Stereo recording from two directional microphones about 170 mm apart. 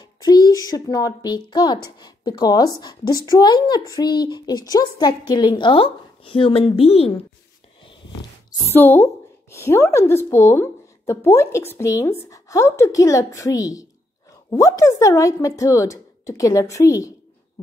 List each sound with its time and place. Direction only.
0.0 s speech: 20° left (ahead or behind)
7.8 s a sound: 30° left (ahead or behind)
8.7 s a woman's voice: 10° left (ahead or behind)